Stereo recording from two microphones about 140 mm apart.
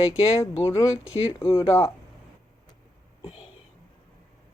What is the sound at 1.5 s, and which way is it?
Speech, 40° left (ahead or behind).